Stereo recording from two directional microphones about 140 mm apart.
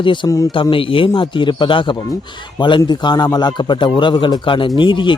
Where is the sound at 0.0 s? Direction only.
35° left (ahead or behind).